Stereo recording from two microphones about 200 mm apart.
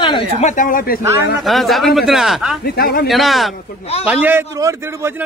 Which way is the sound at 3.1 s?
Centre (ahead or behind).